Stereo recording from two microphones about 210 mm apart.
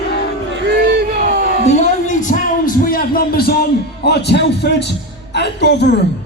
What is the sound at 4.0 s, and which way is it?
A man's voice, 50° left (ahead or behind).